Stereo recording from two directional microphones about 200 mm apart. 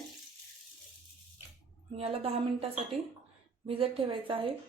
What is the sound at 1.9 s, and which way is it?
Speech, 30° right (ahead or behind).